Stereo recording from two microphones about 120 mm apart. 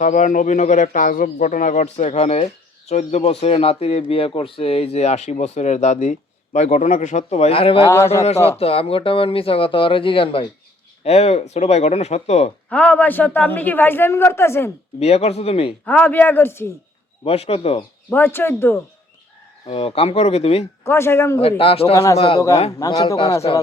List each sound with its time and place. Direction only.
0.0 s a man's voice: 90° left; by 7.9 s 50° left (ahead or behind)
7.9 s speech: 20° left (ahead or behind)
8.4 s speech: 55° left (ahead or behind)
11.0 s speech: 65° left (ahead or behind)
12.7 s a man's voice: 10° left (ahead or behind)
14.9 s speech: 60° left (ahead or behind)
15.9 s a man's voice: 15° left (ahead or behind)
17.2 s speech: 55° left (ahead or behind)
18.1 s speech: 15° left (ahead or behind)
19.6 s speech: 55° left (ahead or behind)
20.8 s speech: 20° left (ahead or behind)
21.6 s speech: 50° left (ahead or behind)
21.9 s speech: 25° left (ahead or behind)
23.0 s speech: 45° left (ahead or behind)